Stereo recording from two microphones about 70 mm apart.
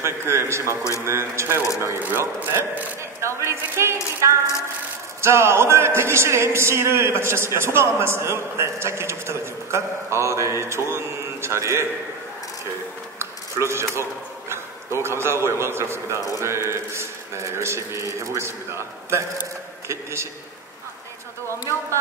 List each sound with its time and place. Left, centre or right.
0.0 s speech: right
13.2 s a sound: right
14.5 s a man's voice: right